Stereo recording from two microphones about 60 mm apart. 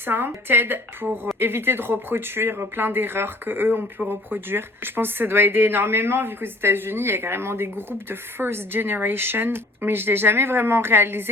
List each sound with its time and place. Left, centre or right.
0.0 s speech: right